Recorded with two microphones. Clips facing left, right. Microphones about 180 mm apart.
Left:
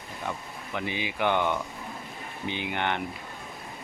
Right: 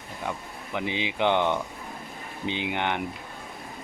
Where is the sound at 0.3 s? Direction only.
15° right (ahead or behind).